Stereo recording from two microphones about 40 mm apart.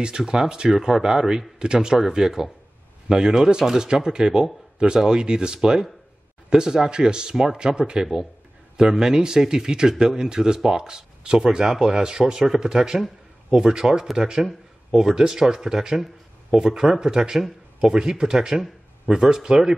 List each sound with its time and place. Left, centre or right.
0.0 s speech: centre